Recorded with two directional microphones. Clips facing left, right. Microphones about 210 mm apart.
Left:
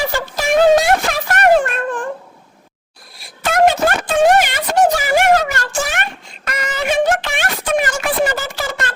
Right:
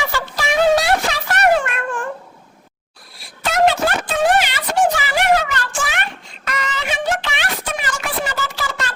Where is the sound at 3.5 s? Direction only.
50° left (ahead or behind).